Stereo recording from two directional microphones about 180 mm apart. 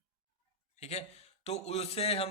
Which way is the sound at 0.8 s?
35° left (ahead or behind).